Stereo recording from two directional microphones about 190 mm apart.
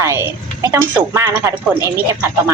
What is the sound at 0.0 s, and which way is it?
A woman's voice, 15° right (ahead or behind).